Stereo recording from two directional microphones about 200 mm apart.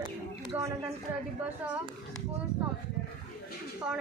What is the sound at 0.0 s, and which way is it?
Bird, 25° right (ahead or behind).